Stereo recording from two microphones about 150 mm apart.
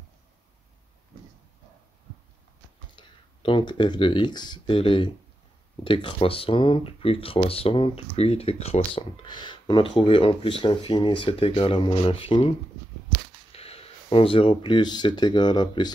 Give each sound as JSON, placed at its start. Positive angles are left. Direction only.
{"t": 3.0, "sound": "speech", "side_deg": 30}